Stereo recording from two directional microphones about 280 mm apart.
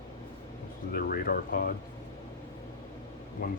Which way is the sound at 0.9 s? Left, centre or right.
Left.